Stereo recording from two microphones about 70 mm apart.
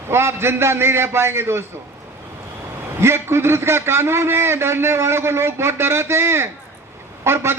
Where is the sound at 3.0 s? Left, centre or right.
Right.